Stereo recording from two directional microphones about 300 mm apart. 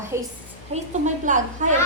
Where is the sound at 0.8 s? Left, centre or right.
Right.